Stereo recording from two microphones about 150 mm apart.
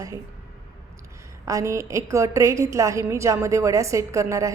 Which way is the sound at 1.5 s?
20° right (ahead or behind).